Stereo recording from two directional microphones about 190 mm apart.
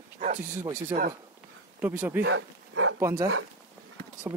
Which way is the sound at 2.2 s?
80° right.